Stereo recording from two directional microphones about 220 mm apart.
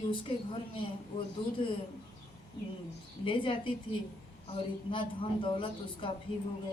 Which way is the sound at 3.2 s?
25° left (ahead or behind).